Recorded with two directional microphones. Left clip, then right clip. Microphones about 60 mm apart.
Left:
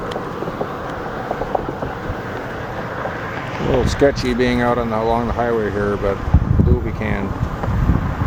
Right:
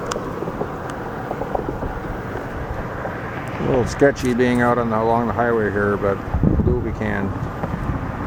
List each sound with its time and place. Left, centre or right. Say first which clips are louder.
3.6 s vehicle: left 1 dB; left
4.3 s speech: even; centre
4.9 s speech: even; centre
5.4 s speech: even; centre
7.0 s speech: left 1 dB; centre